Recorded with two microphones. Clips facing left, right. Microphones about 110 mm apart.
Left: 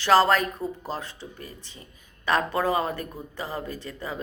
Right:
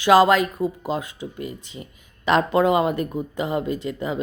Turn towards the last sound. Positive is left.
turn(degrees=-20)  # may be behind; listen again after turning